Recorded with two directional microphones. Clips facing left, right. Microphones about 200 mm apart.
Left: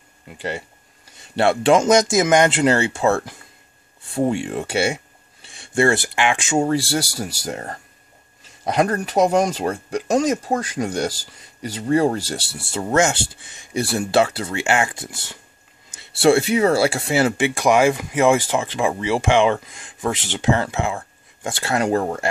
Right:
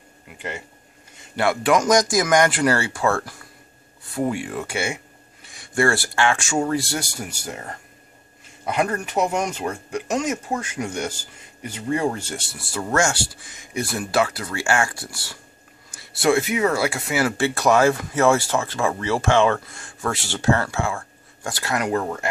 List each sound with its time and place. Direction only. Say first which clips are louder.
1.1 s speech: left 4 dB; 30° left (ahead or behind)
8.6 s speech: left 4 dB; 35° left (ahead or behind)
17.4 s speech: right 2 dB; 15° left (ahead or behind); by 22.3 s 30° left (ahead or behind)